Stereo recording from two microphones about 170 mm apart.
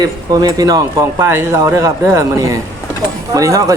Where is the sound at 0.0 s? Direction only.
20° right (ahead or behind).